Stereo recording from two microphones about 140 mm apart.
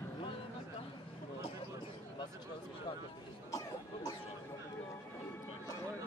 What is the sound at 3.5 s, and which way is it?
Cough, 25° left (ahead or behind).